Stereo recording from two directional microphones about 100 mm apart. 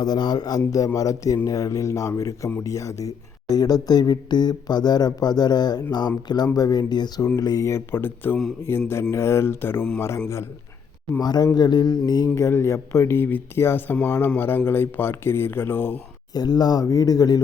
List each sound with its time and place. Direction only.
0.0 s speech: 45° left (ahead or behind)
7.7 s speech: 20° left (ahead or behind)
11.2 s speech: 45° left (ahead or behind)
12.3 s speech: 25° left (ahead or behind)
13.1 s speech: 20° left (ahead or behind)
16.3 s speech: 40° left (ahead or behind)